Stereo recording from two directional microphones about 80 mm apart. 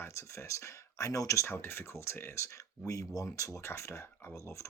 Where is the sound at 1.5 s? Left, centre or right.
Left.